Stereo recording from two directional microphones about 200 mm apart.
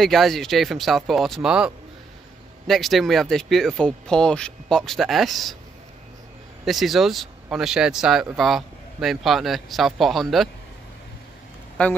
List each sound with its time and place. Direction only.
0.0 s speech: centre (ahead or behind)
6.6 s speech: centre (ahead or behind)
11.8 s a man's voice: 5° left (ahead or behind)